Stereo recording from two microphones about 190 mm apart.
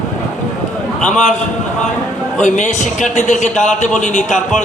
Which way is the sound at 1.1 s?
40° left (ahead or behind).